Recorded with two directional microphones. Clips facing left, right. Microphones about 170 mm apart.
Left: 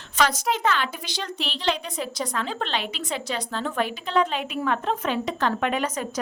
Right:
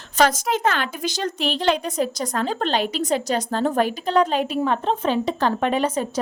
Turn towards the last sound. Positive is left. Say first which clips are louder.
# right 4 dB
turn(degrees=-30)  # may be behind; listen again after turning